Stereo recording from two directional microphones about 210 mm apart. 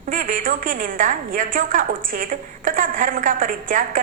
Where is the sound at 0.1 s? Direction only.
40° right (ahead or behind).